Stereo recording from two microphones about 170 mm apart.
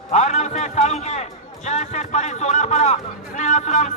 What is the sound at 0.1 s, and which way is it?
A man's voice, 40° left (ahead or behind).